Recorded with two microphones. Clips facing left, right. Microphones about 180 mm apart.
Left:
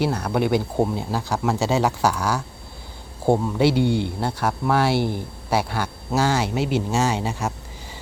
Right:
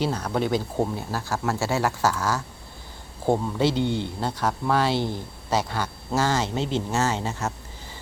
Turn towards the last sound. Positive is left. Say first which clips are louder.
# left 3 dB
turn(degrees=15)  # may be behind; listen again after turning